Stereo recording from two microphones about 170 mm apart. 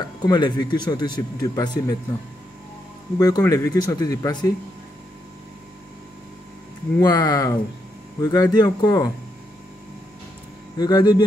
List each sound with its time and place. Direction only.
0.2 s speech: 25° left (ahead or behind)
3.2 s speech: 20° left (ahead or behind)
7.0 s speech: 25° left (ahead or behind)
10.8 s speech: 25° left (ahead or behind)